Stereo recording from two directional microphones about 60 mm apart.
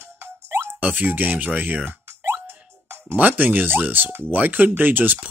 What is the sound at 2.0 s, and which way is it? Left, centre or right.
Plop, right.